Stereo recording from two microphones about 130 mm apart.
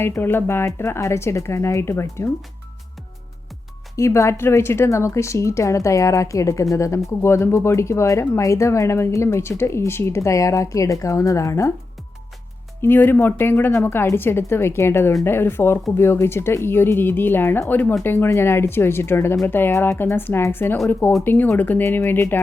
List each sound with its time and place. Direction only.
0.0 s speech: 15° left (ahead or behind)
3.9 s speech: 25° left (ahead or behind)
12.8 s a woman's voice: 15° left (ahead or behind)